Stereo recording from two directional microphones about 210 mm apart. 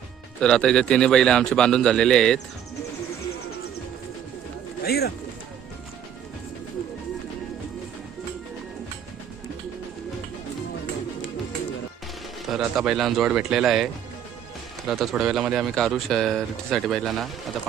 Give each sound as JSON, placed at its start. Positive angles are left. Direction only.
{"t": 0.4, "sound": "speech", "side_deg": 5}
{"t": 4.8, "sound": "speech", "side_deg": 50}
{"t": 12.5, "sound": "speech", "side_deg": 0}